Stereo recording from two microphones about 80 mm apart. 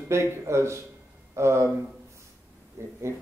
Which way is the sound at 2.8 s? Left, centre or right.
Right.